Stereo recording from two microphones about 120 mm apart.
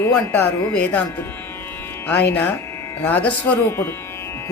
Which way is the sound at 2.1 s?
15° left (ahead or behind).